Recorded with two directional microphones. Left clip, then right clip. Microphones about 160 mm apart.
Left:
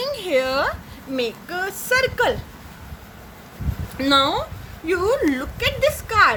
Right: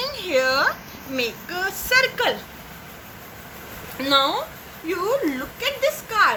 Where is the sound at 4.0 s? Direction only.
65° left (ahead or behind).